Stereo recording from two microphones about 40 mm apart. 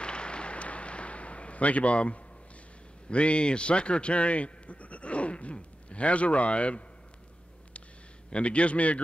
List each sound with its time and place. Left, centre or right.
0.0 s a sound: left
3.1 s a man's voice: left
8.3 s a man's voice: left